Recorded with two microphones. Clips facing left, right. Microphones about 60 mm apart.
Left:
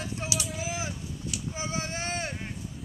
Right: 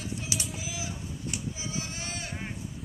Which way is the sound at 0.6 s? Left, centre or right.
Left.